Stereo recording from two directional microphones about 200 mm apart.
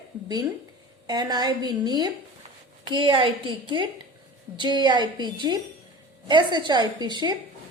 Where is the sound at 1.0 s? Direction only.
20° right (ahead or behind).